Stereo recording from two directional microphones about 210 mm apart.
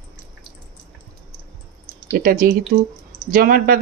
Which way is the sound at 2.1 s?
40° right (ahead or behind).